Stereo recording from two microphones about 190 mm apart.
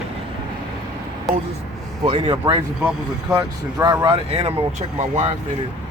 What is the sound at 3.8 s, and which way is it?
Speech, 20° right (ahead or behind).